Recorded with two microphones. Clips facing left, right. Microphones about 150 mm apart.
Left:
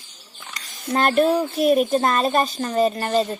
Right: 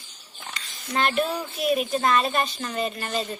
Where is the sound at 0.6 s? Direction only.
45° left (ahead or behind).